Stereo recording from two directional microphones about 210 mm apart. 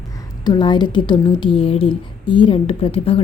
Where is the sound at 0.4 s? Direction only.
20° left (ahead or behind).